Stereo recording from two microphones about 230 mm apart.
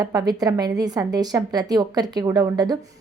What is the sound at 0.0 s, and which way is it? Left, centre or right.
A woman's voice, centre.